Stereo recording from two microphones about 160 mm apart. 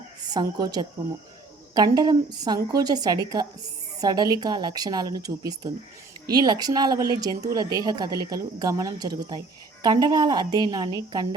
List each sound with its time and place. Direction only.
0.3 s speech: 25° right (ahead or behind)